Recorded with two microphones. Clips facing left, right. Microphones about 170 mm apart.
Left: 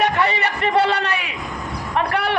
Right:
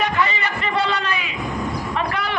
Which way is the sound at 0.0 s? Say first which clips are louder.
Left 3 dB; 65° left (ahead or behind).